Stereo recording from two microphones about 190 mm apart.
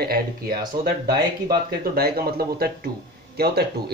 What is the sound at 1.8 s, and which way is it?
Speech, 55° right (ahead or behind).